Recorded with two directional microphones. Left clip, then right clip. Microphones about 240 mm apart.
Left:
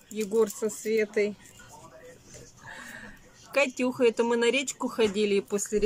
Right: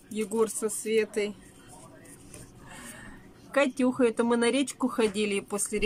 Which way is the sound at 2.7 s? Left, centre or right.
Centre.